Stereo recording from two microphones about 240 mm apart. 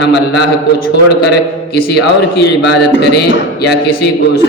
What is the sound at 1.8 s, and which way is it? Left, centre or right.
A man's voice, left.